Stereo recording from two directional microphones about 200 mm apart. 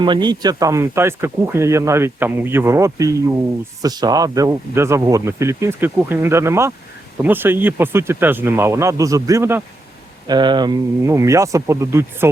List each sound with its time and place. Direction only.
0.0 s speech: 20° right (ahead or behind)